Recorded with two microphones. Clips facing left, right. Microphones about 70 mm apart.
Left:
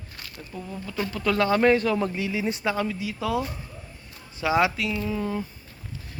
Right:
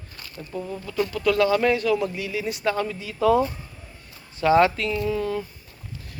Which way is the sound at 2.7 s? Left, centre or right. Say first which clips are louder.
Right 1 dB; centre.